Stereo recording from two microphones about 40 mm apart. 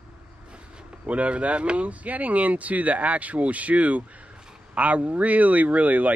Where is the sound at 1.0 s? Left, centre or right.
Right.